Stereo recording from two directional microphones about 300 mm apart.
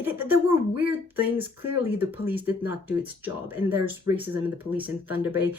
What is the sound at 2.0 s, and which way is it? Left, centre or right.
Speech, centre.